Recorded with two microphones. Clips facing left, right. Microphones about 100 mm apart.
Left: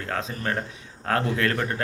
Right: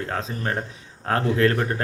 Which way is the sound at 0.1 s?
30° right (ahead or behind).